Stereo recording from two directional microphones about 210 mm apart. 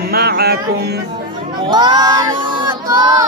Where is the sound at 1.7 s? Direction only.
20° right (ahead or behind).